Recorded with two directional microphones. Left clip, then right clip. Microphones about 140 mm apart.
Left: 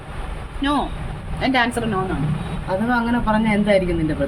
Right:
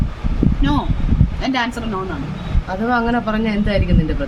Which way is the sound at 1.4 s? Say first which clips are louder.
Left 2 dB; 15° left (ahead or behind).